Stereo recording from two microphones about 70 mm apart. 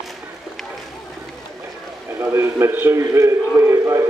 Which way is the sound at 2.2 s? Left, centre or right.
Right.